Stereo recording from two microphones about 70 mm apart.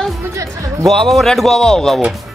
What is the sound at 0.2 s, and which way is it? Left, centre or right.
Speech, right.